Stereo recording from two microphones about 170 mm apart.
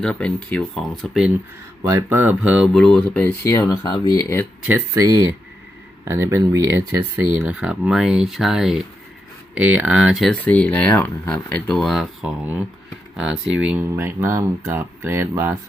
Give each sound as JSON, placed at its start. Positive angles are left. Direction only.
{"t": 0.0, "sound": "speech", "side_deg": 5}
{"t": 1.8, "sound": "speech", "side_deg": -15}
{"t": 4.6, "sound": "speech", "side_deg": -15}